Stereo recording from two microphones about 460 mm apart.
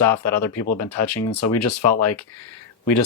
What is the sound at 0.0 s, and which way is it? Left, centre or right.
Speech, left.